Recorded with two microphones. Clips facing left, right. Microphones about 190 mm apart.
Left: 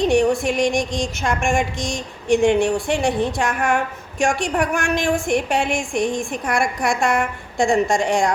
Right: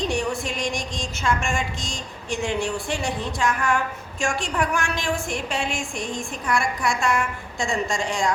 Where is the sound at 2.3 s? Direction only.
55° left (ahead or behind).